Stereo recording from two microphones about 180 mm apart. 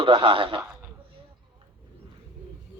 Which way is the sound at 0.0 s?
30° right (ahead or behind).